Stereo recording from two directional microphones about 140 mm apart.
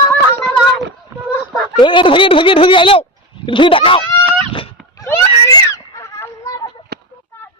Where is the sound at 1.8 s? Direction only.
35° left (ahead or behind).